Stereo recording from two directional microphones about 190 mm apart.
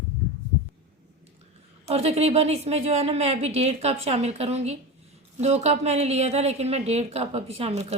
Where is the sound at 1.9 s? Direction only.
35° right (ahead or behind).